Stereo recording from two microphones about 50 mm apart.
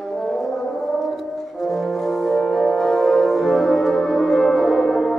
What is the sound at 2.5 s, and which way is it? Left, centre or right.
Music, centre.